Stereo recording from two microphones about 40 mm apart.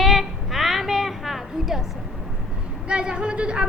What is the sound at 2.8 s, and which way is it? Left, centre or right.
Speech, right.